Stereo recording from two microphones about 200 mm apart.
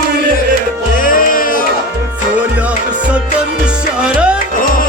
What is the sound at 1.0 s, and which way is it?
Music, 45° left (ahead or behind).